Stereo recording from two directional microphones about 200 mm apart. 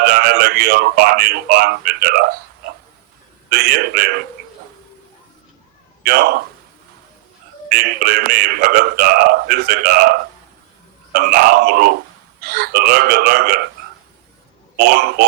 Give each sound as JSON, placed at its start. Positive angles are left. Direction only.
{"t": 0.0, "sound": "speech", "side_deg": -50}
{"t": 6.0, "sound": "speech", "side_deg": -50}
{"t": 7.7, "sound": "speech", "side_deg": -50}
{"t": 14.8, "sound": "speech", "side_deg": -55}